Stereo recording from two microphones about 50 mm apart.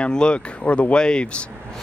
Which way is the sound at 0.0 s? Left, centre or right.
Centre.